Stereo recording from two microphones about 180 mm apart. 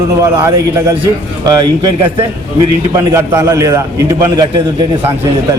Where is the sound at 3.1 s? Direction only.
15° right (ahead or behind).